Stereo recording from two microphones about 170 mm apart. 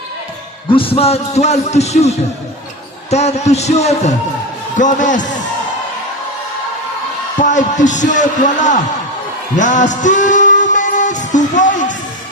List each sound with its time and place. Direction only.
0.7 s a man's voice: 30° left (ahead or behind); by 5.5 s 50° left (ahead or behind)
7.3 s a man's voice: 45° left (ahead or behind)
9.6 s music: 45° left (ahead or behind)